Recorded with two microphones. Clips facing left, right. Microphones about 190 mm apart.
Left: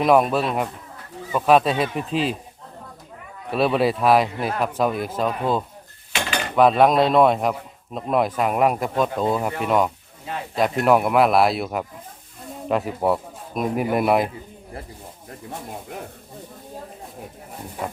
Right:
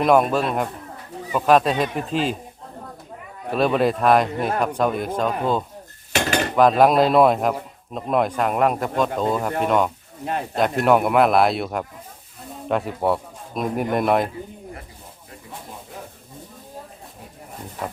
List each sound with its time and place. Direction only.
0.0 s speech: centre (ahead or behind)
3.5 s speech: 5° left (ahead or behind)
10.2 s speech: 55° right (ahead or behind)
10.6 s speech: centre (ahead or behind)